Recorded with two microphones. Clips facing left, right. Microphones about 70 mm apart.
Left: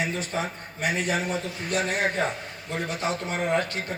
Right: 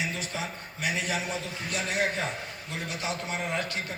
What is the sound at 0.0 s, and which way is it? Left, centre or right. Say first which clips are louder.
A man's voice: left 5 dB; left.